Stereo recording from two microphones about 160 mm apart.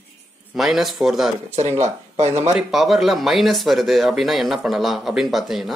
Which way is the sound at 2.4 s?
5° right (ahead or behind).